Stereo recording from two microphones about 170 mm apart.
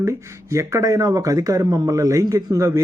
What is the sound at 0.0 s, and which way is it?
Speech, 15° right (ahead or behind).